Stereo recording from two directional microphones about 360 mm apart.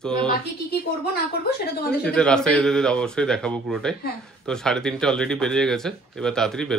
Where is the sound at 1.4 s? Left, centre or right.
Left.